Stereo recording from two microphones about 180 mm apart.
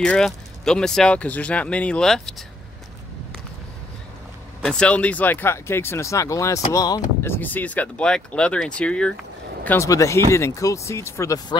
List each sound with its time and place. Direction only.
0.0 s speech: 5° left (ahead or behind)
4.6 s speech: 5° left (ahead or behind)
9.7 s speech: 15° left (ahead or behind)